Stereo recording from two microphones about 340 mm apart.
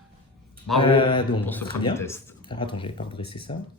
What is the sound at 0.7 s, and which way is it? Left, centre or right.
Speech, centre.